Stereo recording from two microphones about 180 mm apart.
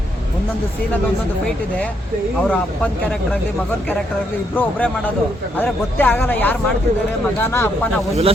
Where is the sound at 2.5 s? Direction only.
10° left (ahead or behind).